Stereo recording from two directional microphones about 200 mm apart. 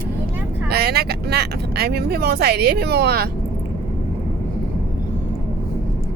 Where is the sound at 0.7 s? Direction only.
55° right (ahead or behind).